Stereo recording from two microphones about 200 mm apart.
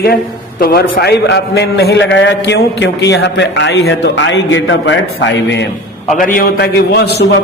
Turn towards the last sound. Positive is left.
turn(degrees=55)  # may be behind; listen again after turning